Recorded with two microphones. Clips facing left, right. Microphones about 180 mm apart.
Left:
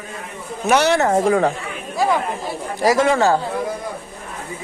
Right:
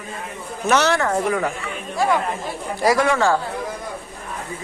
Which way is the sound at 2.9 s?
25° left (ahead or behind).